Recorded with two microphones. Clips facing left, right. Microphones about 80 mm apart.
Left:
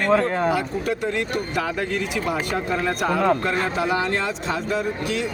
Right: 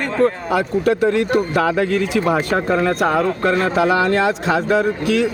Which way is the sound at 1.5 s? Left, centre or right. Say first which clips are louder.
Right 8 dB; right.